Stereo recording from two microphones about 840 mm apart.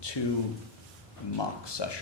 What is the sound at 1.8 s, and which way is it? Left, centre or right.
Speech, left.